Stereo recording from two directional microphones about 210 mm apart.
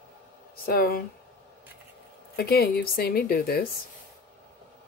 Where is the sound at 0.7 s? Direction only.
45° left (ahead or behind).